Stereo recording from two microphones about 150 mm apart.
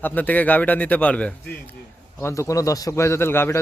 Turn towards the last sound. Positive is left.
turn(degrees=15)  # may be behind; listen again after turning